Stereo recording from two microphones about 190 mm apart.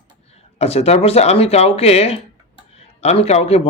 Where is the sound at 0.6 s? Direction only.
35° left (ahead or behind).